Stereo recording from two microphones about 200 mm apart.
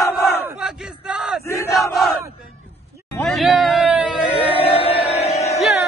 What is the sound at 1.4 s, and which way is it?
Crowd, 15° left (ahead or behind).